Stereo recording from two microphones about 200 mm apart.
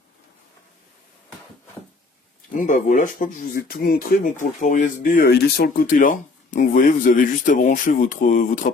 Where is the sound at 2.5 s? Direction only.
40° left (ahead or behind).